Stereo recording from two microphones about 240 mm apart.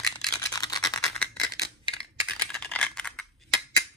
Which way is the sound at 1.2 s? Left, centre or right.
Centre.